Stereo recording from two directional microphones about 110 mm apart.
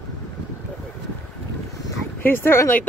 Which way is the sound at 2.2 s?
20° left (ahead or behind).